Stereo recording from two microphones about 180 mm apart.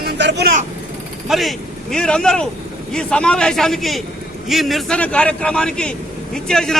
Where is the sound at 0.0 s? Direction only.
70° right (ahead or behind).